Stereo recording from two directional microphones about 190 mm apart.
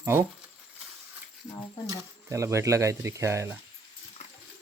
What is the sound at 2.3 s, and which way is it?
Speech, 15° right (ahead or behind).